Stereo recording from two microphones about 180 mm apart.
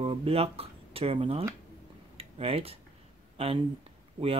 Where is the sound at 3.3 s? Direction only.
30° right (ahead or behind).